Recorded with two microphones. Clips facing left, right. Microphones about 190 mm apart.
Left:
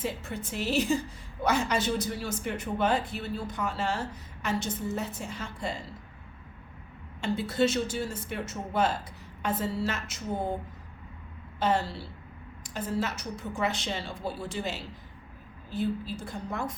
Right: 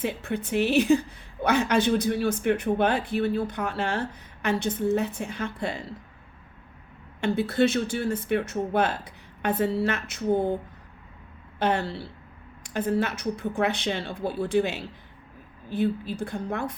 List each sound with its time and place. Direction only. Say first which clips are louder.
0.0 s speech: right 5 dB; 60° right (ahead or behind)
7.2 s speech: right 4 dB; 60° right (ahead or behind)
11.6 s speech: right 2 dB; 60° right (ahead or behind)